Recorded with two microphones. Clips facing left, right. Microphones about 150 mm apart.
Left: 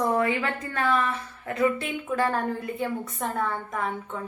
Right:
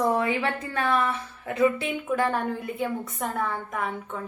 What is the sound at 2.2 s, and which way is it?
A woman's voice, 5° right (ahead or behind).